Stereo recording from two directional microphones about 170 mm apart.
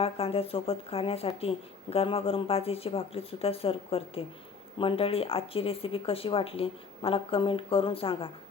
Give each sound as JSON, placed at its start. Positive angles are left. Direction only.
{"t": 0.0, "sound": "speech", "side_deg": 35}